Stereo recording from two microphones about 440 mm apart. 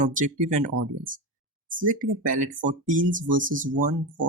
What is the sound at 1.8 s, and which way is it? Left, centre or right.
Speech, centre.